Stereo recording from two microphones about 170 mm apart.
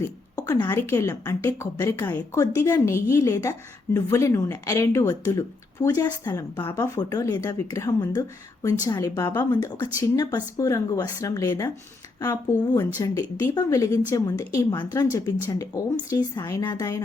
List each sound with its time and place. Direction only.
0.3 s a woman's voice: 20° left (ahead or behind)